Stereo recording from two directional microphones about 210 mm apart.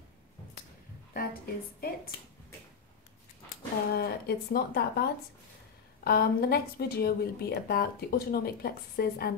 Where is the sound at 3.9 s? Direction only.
45° left (ahead or behind).